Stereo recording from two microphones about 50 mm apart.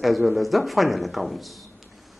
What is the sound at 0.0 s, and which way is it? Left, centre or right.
Speech, centre.